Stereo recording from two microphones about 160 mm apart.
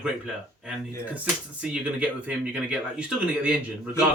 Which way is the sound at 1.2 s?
5° right (ahead or behind).